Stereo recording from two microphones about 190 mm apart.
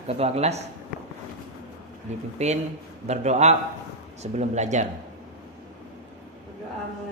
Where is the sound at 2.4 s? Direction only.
35° right (ahead or behind).